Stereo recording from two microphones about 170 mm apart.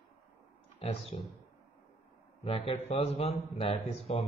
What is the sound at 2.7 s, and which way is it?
Speech, 35° left (ahead or behind).